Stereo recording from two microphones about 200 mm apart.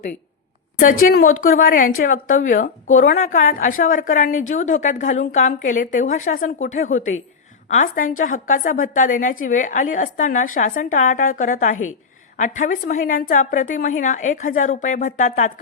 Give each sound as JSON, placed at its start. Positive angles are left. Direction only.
{"t": 1.4, "sound": "a woman's voice", "side_deg": 45}